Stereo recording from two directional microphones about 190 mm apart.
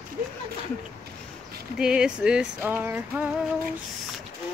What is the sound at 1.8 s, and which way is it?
Speech, 5° right (ahead or behind).